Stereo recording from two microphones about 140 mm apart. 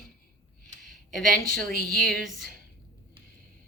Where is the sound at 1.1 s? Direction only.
5° left (ahead or behind).